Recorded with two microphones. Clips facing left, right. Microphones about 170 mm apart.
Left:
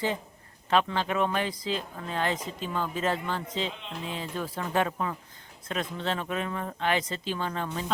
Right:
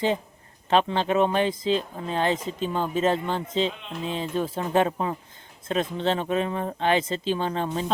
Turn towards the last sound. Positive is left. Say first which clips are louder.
# right 5 dB
turn(degrees=-30)  # may be behind; listen again after turning